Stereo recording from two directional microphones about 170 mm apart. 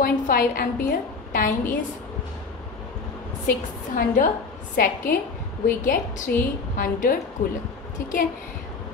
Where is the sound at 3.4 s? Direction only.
50° left (ahead or behind).